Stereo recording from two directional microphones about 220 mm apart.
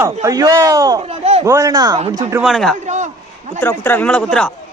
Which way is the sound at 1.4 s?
15° right (ahead or behind).